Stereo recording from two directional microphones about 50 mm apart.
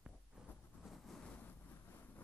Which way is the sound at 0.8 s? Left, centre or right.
Centre.